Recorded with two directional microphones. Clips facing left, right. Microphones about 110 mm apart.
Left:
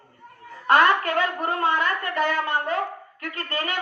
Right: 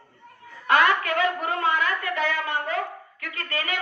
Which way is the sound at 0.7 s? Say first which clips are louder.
Left 2 dB; 35° left (ahead or behind).